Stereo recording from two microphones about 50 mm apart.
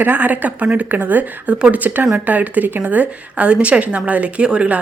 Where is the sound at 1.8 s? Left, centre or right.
Right; by 4.7 s centre.